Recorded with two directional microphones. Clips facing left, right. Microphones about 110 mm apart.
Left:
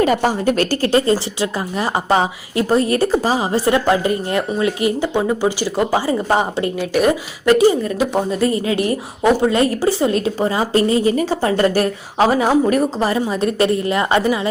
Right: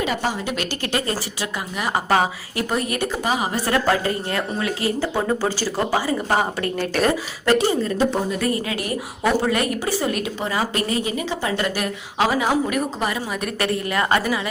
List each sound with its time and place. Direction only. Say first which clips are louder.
0.0 s a woman's voice: left 8 dB; 45° left (ahead or behind); by 6.7 s 25° left (ahead or behind)
6.7 s speech: left 4 dB; 10° left (ahead or behind)
8.4 s a woman's voice: left 6 dB; 25° left (ahead or behind)
11.1 s a woman's voice: left 7 dB; 40° left (ahead or behind); by 14.3 s 25° left (ahead or behind)